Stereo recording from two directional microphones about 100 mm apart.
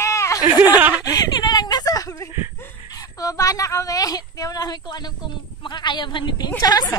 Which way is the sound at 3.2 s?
35° left (ahead or behind).